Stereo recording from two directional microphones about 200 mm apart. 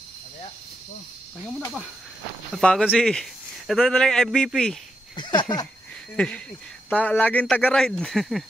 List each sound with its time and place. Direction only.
2.5 s speech: 5° left (ahead or behind)
5.1 s speech: 25° left (ahead or behind)
6.1 s speech: 5° left (ahead or behind)